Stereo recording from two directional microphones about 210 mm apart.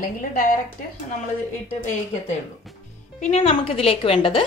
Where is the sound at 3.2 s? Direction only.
30° left (ahead or behind).